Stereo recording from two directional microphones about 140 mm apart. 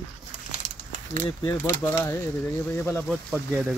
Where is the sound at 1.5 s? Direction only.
20° left (ahead or behind).